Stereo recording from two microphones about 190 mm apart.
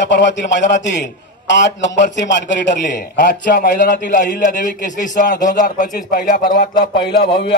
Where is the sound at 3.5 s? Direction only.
55° left (ahead or behind).